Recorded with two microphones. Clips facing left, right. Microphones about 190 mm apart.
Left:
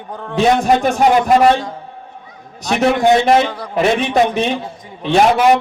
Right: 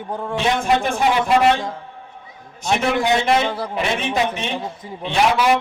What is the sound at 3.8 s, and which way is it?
Speech, 40° left (ahead or behind).